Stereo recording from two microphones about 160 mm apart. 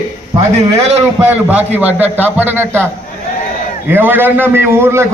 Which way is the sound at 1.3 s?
10° right (ahead or behind).